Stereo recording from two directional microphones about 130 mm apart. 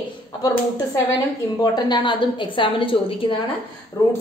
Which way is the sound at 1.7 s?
35° left (ahead or behind).